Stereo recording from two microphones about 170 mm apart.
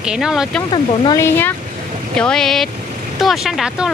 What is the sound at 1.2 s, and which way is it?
Speech, 10° left (ahead or behind).